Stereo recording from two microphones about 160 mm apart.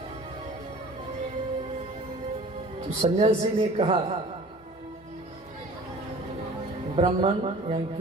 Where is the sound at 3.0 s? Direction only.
45° right (ahead or behind).